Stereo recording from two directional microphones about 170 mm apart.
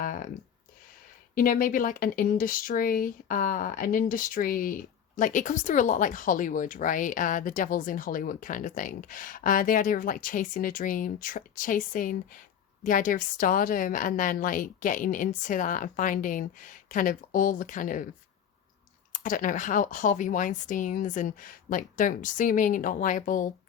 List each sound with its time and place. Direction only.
0.0 s a sound: 55° left (ahead or behind)
1.4 s speech: 55° left (ahead or behind)
19.1 s speech: 50° left (ahead or behind)